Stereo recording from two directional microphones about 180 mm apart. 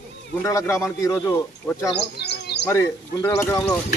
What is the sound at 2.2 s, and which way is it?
Bird, 70° left (ahead or behind).